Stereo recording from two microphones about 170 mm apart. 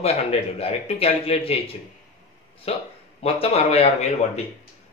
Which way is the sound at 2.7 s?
35° left (ahead or behind).